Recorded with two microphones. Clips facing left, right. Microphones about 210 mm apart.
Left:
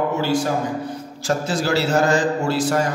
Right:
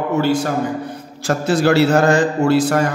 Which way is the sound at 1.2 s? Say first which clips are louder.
Right 5 dB; 60° right (ahead or behind).